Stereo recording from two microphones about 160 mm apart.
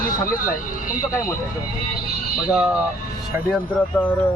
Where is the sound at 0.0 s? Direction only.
60° left (ahead or behind).